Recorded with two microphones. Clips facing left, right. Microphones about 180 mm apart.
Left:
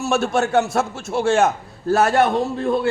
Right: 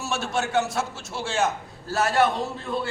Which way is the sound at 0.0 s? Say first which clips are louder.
Left 8 dB; 55° left (ahead or behind).